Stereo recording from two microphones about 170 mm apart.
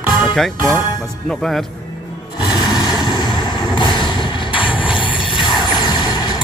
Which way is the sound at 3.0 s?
25° left (ahead or behind).